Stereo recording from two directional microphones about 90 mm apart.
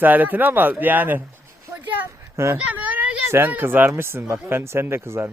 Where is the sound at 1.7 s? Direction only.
20° right (ahead or behind).